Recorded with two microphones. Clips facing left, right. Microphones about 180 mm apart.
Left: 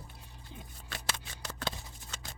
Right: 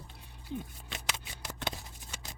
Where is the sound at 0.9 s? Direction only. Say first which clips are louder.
Even; 20° right (ahead or behind).